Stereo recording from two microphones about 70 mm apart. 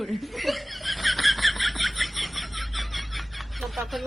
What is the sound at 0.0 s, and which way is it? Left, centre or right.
Snicker, centre.